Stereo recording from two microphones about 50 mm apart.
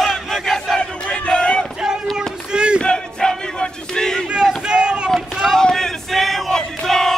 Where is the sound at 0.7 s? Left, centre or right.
Left.